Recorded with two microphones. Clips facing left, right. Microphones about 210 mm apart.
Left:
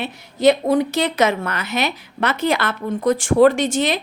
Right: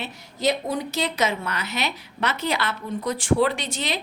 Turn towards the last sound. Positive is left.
turn(degrees=50)  # may be behind; listen again after turning